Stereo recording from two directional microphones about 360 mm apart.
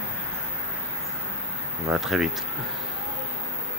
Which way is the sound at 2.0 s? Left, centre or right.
Centre.